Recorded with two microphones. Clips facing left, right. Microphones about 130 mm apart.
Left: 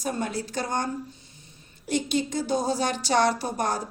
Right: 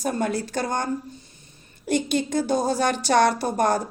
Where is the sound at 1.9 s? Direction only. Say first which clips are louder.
Right 3 dB; 55° right (ahead or behind).